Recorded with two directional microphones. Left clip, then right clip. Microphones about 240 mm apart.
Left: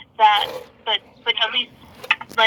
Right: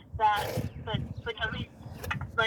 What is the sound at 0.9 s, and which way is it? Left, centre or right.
Vehicle, left.